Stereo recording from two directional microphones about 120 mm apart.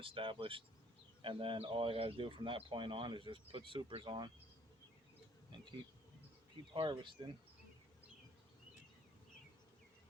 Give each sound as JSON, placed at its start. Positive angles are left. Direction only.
{"t": 0.0, "sound": "speech", "side_deg": -45}
{"t": 6.7, "sound": "speech", "side_deg": -40}